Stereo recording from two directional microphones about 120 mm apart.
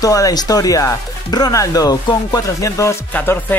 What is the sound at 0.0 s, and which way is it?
Speech, 30° left (ahead or behind).